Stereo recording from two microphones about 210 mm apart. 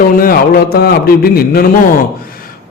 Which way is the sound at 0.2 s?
45° left (ahead or behind).